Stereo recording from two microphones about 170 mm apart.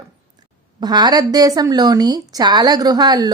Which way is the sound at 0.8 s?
25° right (ahead or behind).